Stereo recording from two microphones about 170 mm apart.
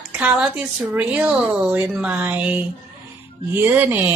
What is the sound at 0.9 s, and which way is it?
Speech, 10° right (ahead or behind).